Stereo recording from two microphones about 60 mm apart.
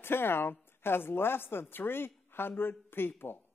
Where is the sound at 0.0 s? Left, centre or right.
Left.